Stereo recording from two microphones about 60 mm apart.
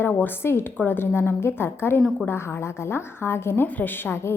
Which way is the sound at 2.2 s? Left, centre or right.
Left.